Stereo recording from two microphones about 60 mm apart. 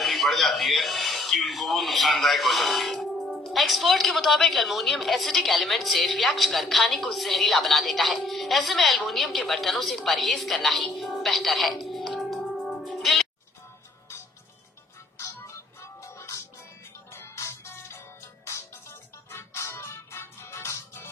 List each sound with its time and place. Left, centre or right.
0.0 s a man's voice: centre
15.2 s music: left